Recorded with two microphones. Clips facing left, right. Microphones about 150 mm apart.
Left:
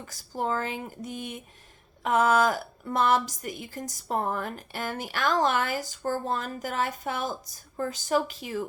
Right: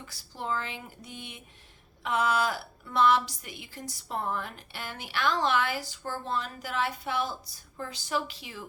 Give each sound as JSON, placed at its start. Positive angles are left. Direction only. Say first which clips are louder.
{"t": 0.0, "sound": "a woman's voice", "louder": "left 7 dB", "side_deg": 45}